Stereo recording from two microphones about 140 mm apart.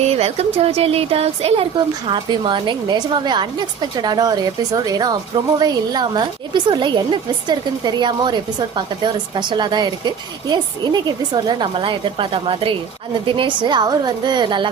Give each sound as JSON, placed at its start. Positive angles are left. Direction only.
{"t": 0.0, "sound": "speech", "side_deg": -50}